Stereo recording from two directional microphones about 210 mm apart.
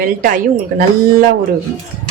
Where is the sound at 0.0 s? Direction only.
40° right (ahead or behind).